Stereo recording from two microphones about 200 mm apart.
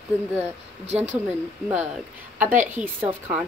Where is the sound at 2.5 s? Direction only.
40° right (ahead or behind).